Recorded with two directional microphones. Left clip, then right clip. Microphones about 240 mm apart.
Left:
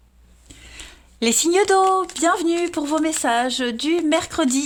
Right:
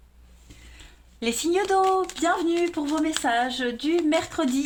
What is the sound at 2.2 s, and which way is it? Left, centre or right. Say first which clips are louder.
Speech: left 4 dB; left.